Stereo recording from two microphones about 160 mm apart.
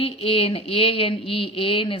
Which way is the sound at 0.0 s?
35° left (ahead or behind).